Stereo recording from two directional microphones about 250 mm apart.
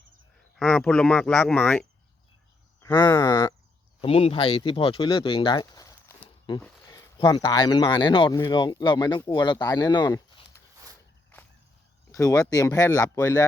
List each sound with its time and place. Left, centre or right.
0.6 s speech: centre
12.1 s speech: centre